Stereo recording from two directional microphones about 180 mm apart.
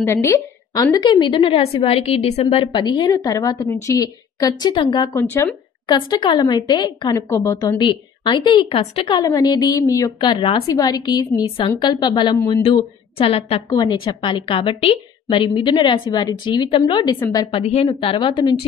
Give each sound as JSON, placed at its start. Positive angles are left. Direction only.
{"t": 0.0, "sound": "a woman's voice", "side_deg": 15}
{"t": 5.9, "sound": "a woman's voice", "side_deg": 25}
{"t": 12.6, "sound": "a woman's voice", "side_deg": 30}